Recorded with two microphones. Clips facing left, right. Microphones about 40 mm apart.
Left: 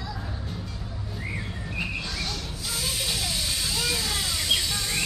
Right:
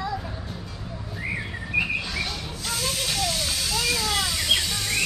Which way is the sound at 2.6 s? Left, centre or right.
Centre.